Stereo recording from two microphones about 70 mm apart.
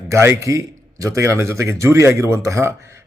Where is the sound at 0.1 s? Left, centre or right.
Right.